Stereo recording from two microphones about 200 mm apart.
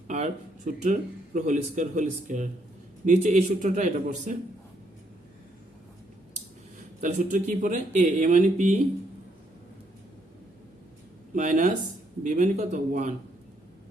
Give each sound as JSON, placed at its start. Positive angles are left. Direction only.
{"t": 0.1, "sound": "speech", "side_deg": -35}
{"t": 7.0, "sound": "speech", "side_deg": -40}
{"t": 11.3, "sound": "speech", "side_deg": -35}